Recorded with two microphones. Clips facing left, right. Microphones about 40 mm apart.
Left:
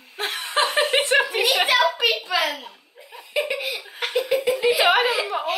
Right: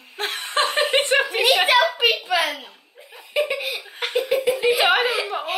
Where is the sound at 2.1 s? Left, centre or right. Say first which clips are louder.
Right 1 dB; centre.